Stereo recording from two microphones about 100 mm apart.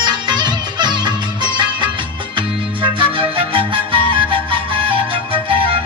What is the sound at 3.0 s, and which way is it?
Music, 60° right (ahead or behind).